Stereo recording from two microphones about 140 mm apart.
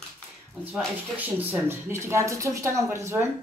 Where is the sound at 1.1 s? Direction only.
10° right (ahead or behind).